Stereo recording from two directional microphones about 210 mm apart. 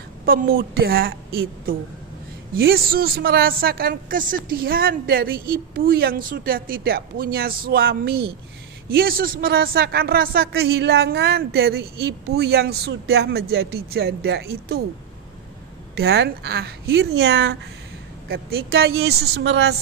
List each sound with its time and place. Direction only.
0.2 s speech: 45° right (ahead or behind)
15.9 s speech: 50° right (ahead or behind)